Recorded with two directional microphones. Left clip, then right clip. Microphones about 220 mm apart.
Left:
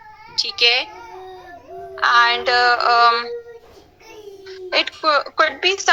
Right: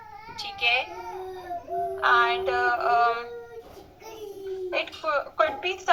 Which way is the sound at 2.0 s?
55° left (ahead or behind).